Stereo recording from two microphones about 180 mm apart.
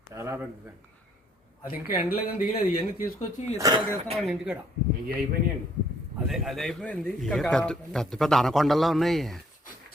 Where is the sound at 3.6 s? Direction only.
20° right (ahead or behind).